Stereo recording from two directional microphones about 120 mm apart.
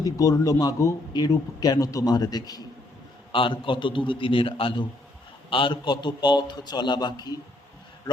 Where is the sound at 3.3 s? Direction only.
45° left (ahead or behind).